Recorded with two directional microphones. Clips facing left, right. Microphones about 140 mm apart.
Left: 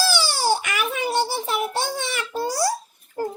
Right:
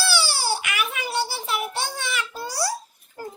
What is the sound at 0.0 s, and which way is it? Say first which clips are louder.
Baby cry: left 3 dB; 40° left (ahead or behind).